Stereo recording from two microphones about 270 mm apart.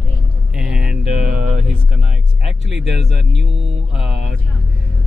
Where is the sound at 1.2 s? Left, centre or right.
Right.